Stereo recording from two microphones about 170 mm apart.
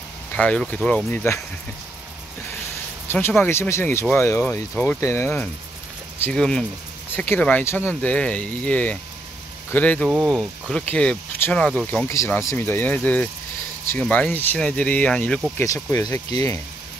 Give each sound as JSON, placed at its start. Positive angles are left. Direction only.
{"t": 0.4, "sound": "speech", "side_deg": 5}
{"t": 3.1, "sound": "speech", "side_deg": 15}
{"t": 10.0, "sound": "speech", "side_deg": -5}
{"t": 10.9, "sound": "speech", "side_deg": 10}
{"t": 12.1, "sound": "speech", "side_deg": 15}
{"t": 15.5, "sound": "speech", "side_deg": 20}